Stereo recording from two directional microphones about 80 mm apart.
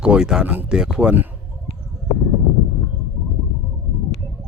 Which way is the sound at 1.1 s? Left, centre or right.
Right.